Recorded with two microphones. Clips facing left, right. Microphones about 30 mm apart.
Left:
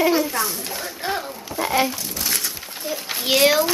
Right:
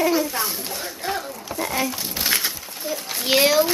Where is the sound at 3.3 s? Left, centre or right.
Centre.